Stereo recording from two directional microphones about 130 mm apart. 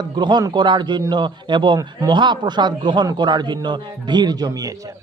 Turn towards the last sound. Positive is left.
turn(degrees=-25)  # may be behind; listen again after turning